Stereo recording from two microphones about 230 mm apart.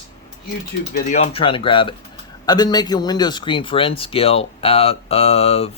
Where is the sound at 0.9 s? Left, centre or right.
Left.